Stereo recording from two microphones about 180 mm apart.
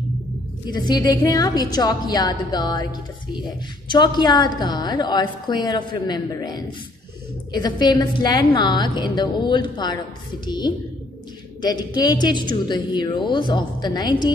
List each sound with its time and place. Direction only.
0.7 s a woman's voice: 25° left (ahead or behind)